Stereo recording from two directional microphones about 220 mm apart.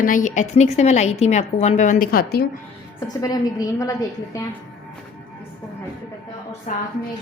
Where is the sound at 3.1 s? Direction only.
15° left (ahead or behind).